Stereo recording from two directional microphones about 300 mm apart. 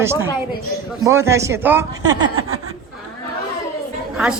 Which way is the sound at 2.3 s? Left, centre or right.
Right.